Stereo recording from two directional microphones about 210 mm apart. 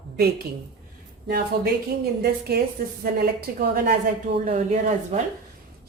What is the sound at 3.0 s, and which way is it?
Speech, 45° right (ahead or behind).